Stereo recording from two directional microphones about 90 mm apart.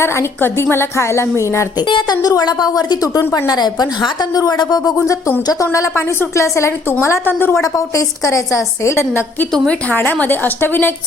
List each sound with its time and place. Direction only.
0.0 s a woman's voice: 25° left (ahead or behind)
1.9 s a woman's voice: 55° left (ahead or behind)
3.2 s a woman's voice: 35° left (ahead or behind)
3.5 s a woman's voice: 50° left (ahead or behind); by 7.6 s 25° left (ahead or behind)
7.6 s a woman's voice: 40° left (ahead or behind); by 10.9 s 25° left (ahead or behind)